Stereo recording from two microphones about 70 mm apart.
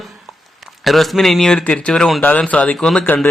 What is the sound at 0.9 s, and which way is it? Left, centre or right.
Speech, centre.